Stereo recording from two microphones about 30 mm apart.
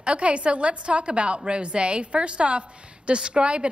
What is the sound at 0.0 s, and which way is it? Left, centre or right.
Speech, right.